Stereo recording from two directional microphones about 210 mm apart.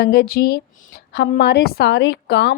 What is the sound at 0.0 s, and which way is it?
A woman's voice, 50° left (ahead or behind).